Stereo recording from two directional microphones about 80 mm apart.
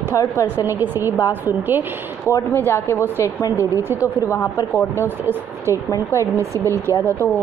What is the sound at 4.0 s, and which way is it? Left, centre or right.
Speech, left.